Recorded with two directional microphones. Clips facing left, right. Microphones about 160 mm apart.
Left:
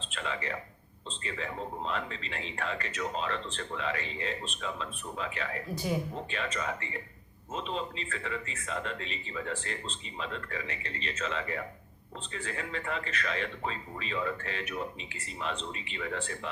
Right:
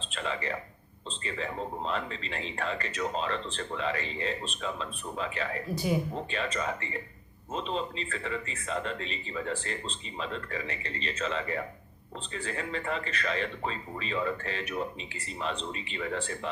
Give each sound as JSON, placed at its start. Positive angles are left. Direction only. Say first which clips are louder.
{"t": 0.0, "sound": "a sound", "louder": "right 2 dB", "side_deg": -35}
{"t": 1.2, "sound": "speech", "louder": "right 2 dB", "side_deg": -35}
{"t": 5.7, "sound": "speech", "louder": "right 3 dB", "side_deg": -10}
{"t": 6.3, "sound": "speech", "louder": "right 2 dB", "side_deg": -35}